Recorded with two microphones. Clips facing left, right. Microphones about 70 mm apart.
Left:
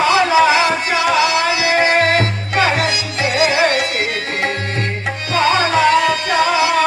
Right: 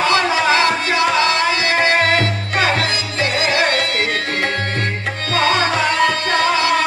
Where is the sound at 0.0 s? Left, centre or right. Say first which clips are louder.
Left 4 dB; centre.